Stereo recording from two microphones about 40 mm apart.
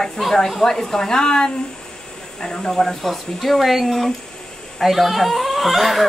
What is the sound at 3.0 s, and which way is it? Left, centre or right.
Speech, centre.